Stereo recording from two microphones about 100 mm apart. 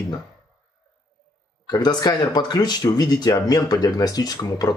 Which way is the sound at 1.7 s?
40° left (ahead or behind).